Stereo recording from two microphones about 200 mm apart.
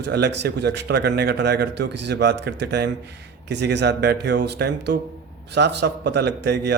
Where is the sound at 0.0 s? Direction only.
60° right (ahead or behind).